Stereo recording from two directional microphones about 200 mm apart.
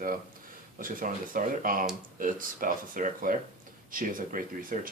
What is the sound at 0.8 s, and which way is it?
Speech, 45° right (ahead or behind).